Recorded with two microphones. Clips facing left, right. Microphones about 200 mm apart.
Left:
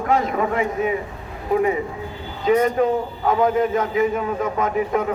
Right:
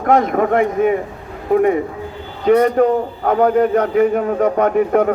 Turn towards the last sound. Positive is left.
turn(degrees=-55)  # may be behind; listen again after turning